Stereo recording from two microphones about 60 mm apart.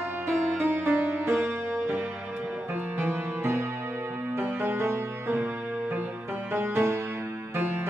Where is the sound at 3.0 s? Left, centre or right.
Right.